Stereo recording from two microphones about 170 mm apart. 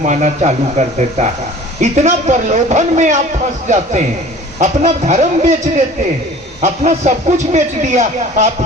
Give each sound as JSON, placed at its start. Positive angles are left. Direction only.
{"t": 0.0, "sound": "speech", "side_deg": -45}
{"t": 4.6, "sound": "a man's voice", "side_deg": -40}